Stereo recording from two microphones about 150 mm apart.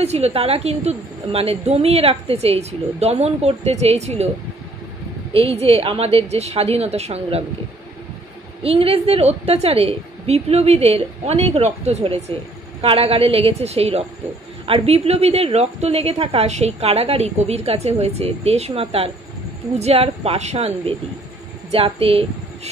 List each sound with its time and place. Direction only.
0.0 s a woman's voice: 45° right (ahead or behind)
5.3 s a woman's voice: 40° right (ahead or behind)
8.6 s a woman's voice: 40° right (ahead or behind)